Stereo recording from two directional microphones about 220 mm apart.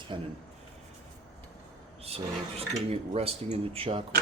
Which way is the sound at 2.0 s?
25° right (ahead or behind).